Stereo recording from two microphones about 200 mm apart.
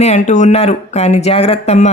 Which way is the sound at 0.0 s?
35° left (ahead or behind).